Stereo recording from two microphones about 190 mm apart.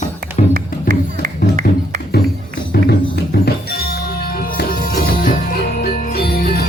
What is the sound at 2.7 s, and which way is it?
Music, 60° left (ahead or behind).